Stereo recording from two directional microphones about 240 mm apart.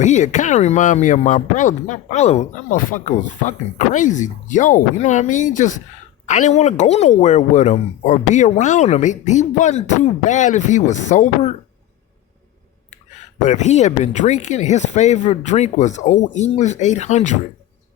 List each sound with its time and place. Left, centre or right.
0.0 s a woman's voice: left
13.4 s a woman's voice: left